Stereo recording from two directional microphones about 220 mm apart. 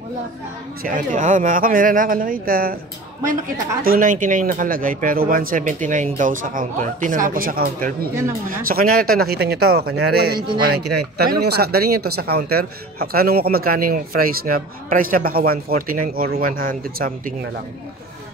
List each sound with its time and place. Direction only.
0.8 s speech: 35° right (ahead or behind)
3.8 s speech: 40° right (ahead or behind)
10.3 s speech: 20° right (ahead or behind)
10.6 s speech: 45° right (ahead or behind)